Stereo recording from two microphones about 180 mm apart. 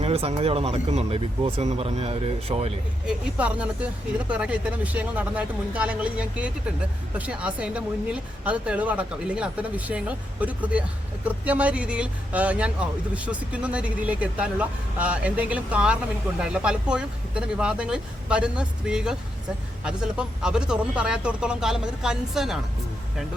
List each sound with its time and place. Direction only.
0.0 s speech: 35° right (ahead or behind)
3.1 s speech: 5° right (ahead or behind)